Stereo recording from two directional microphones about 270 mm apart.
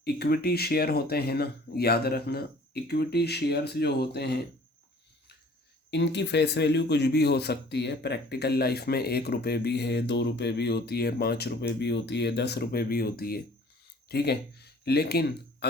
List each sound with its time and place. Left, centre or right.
0.0 s speech: left
5.9 s speech: left